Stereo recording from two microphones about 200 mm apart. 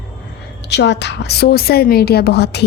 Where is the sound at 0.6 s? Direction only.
60° left (ahead or behind).